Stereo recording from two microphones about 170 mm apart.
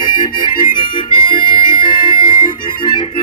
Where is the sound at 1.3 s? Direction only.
25° left (ahead or behind).